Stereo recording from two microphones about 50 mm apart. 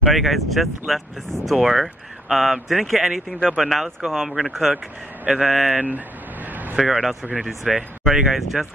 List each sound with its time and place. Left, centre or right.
0.0 s speech: centre
5.2 s a sound: right
6.8 s speech: centre